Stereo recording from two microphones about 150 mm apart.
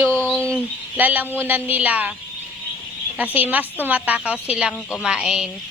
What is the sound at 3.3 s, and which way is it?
Speech, 10° right (ahead or behind).